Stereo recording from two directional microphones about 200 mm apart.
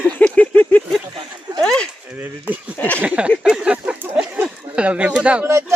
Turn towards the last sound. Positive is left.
turn(degrees=-5)  # may be behind; listen again after turning